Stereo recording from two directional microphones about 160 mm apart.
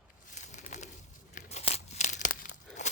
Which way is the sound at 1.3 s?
45° left (ahead or behind).